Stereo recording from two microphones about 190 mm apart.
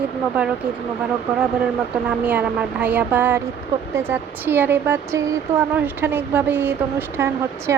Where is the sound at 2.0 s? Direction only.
10° right (ahead or behind).